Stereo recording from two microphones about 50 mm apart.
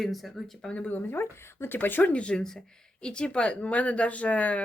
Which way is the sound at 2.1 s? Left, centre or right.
Left.